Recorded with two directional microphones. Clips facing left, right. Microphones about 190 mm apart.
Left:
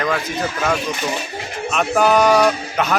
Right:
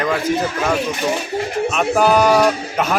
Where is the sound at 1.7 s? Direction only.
5° right (ahead or behind).